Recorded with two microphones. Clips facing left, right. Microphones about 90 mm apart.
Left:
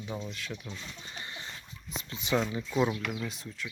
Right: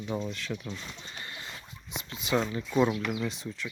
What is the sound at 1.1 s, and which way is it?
Bird, 25° left (ahead or behind).